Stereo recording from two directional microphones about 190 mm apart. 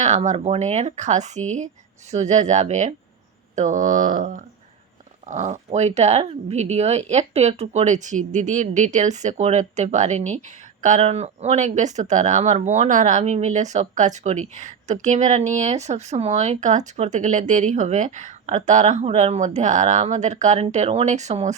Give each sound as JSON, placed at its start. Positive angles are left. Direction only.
{"t": 0.0, "sound": "speech", "side_deg": -35}